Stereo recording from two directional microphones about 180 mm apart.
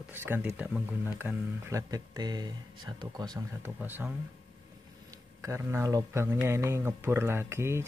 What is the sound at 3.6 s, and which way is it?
Speech, 10° right (ahead or behind).